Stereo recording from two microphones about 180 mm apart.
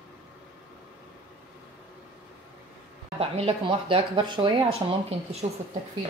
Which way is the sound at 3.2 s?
30° right (ahead or behind).